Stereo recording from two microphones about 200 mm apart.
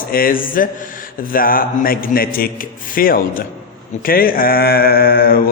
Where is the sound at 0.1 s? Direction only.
45° left (ahead or behind).